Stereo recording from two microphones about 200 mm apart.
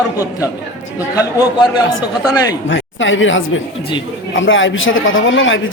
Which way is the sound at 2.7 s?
70° left (ahead or behind).